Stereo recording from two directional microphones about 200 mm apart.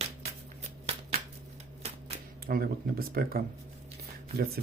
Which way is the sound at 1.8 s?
35° right (ahead or behind).